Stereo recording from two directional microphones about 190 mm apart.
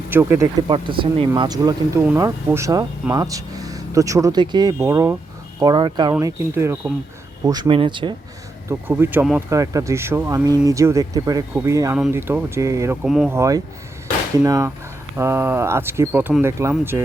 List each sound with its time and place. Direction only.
0.1 s speech: 10° right (ahead or behind)
0.7 s speech: 25° right (ahead or behind)
8.7 s speech: 10° right (ahead or behind)
13.1 s speech: centre (ahead or behind)
13.3 s speech: 15° right (ahead or behind)